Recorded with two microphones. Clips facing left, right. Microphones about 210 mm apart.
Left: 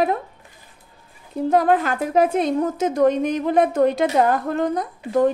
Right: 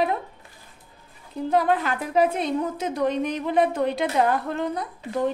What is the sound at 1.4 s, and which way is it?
A woman's voice, 45° left (ahead or behind).